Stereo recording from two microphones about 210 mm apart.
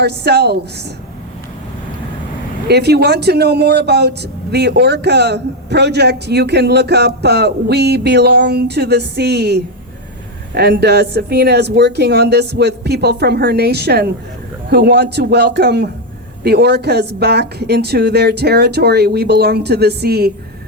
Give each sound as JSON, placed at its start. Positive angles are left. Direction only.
{"t": 0.0, "sound": "speech", "side_deg": -50}
{"t": 2.6, "sound": "speech", "side_deg": -50}